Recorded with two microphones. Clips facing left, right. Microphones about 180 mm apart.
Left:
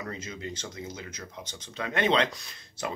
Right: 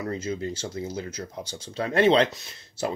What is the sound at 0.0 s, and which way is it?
Speech, 30° right (ahead or behind).